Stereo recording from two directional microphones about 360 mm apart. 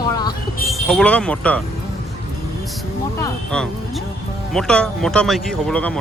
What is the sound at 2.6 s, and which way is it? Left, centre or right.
Vehicle, centre.